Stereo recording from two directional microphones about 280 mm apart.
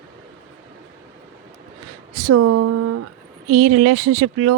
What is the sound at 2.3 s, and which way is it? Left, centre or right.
Speech, right.